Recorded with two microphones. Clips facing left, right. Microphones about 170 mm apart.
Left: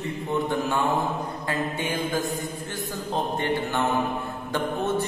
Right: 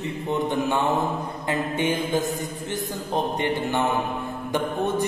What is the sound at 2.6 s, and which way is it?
A man's voice, 20° right (ahead or behind).